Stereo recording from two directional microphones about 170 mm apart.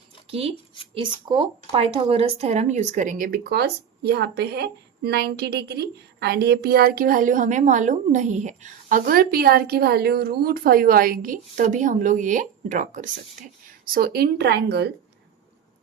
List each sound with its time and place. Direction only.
0.3 s speech: 35° right (ahead or behind)
13.9 s speech: 65° right (ahead or behind)